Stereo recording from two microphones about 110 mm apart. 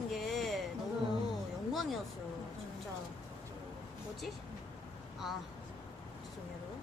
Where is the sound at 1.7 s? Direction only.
Centre (ahead or behind).